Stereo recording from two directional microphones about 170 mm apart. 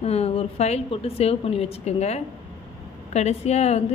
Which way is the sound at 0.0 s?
35° left (ahead or behind).